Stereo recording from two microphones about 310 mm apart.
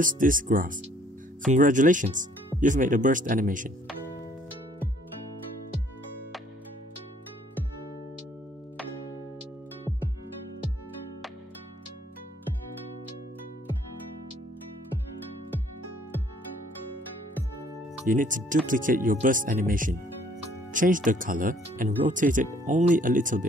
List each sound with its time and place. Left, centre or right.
0.0 s speech: right
18.0 s speech: right